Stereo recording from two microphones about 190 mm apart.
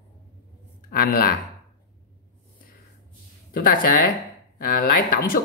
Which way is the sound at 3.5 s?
50° left (ahead or behind).